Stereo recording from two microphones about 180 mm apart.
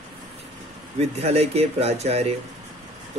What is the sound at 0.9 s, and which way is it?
Speech, 35° right (ahead or behind).